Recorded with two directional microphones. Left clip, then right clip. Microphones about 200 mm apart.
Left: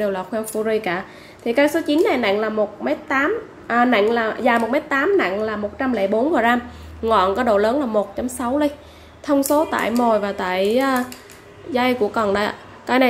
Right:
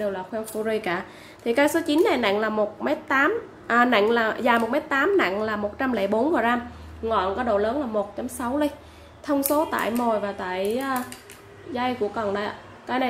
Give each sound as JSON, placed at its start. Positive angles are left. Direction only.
{"t": 0.0, "sound": "a woman's voice", "side_deg": 20}
{"t": 0.7, "sound": "a woman's voice", "side_deg": 5}
{"t": 7.1, "sound": "a woman's voice", "side_deg": 20}